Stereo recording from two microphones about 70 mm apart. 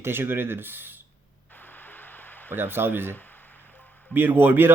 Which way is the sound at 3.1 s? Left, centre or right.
Left.